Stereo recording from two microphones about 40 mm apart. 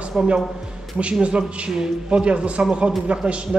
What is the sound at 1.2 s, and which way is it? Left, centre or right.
A man's voice, right.